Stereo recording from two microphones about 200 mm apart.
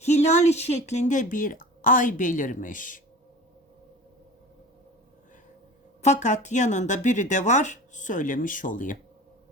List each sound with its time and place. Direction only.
0.0 s a woman's voice: 35° left (ahead or behind)
6.0 s a woman's voice: 35° left (ahead or behind)